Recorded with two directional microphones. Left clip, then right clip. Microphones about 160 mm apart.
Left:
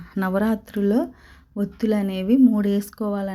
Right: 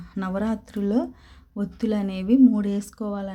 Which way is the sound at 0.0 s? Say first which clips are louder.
Left 5 dB; 5° left (ahead or behind).